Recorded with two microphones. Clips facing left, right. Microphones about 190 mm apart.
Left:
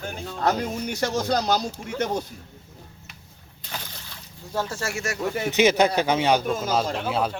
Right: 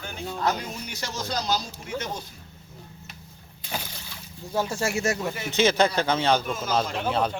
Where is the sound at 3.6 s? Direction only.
10° right (ahead or behind).